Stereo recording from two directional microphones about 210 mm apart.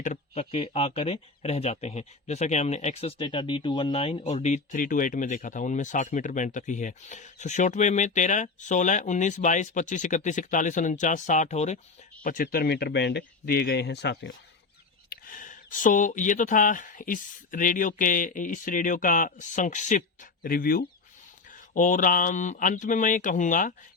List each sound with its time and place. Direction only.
0.0 s speech: 30° left (ahead or behind); by 14.3 s 55° left (ahead or behind)
15.1 s speech: 40° left (ahead or behind)